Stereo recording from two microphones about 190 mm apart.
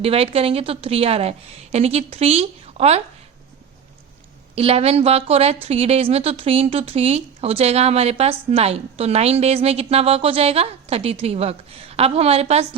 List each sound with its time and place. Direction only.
0.0 s speech: 30° right (ahead or behind)
4.5 s speech: 30° right (ahead or behind)